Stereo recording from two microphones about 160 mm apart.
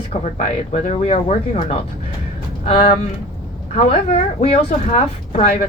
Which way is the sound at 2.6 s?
35° left (ahead or behind).